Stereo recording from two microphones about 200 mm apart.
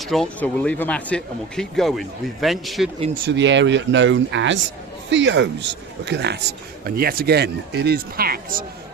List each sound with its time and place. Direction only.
0.0 s speech: centre (ahead or behind)
3.2 s speech: 60° right (ahead or behind); by 8.6 s 45° right (ahead or behind)